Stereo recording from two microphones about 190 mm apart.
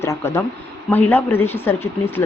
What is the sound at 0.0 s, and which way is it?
Speech, 15° left (ahead or behind).